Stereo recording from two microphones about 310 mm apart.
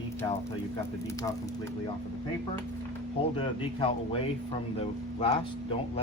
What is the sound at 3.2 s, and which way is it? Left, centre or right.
Speech, centre.